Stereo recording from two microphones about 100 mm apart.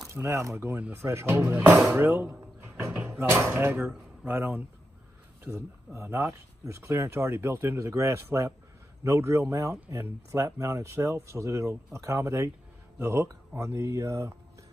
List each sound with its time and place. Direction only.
0.0 s speech: 30° right (ahead or behind)